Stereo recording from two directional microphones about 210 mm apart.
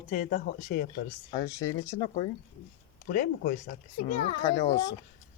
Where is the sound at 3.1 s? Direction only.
45° left (ahead or behind).